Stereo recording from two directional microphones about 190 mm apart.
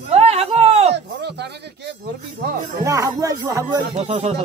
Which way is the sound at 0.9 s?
60° right (ahead or behind).